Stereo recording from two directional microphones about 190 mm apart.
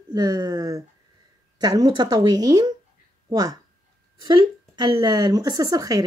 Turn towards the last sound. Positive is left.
turn(degrees=-20)  # may be behind; listen again after turning